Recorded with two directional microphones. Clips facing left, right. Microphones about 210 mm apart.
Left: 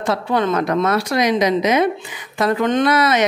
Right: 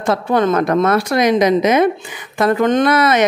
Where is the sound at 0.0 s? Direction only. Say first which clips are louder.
Right 3 dB; 50° right (ahead or behind).